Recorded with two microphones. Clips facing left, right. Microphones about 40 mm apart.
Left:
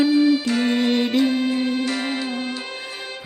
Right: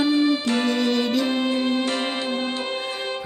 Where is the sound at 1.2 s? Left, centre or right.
Right.